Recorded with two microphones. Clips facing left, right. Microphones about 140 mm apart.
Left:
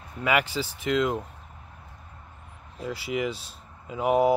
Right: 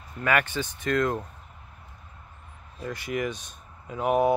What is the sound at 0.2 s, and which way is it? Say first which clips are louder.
Speech: even; 10° left (ahead or behind).